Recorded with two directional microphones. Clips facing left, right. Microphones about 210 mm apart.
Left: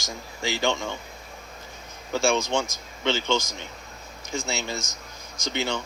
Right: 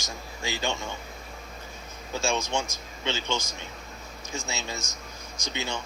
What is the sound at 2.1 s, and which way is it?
Speech, 90° left.